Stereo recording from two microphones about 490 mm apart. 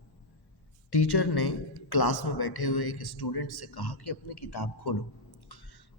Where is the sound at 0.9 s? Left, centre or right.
Left.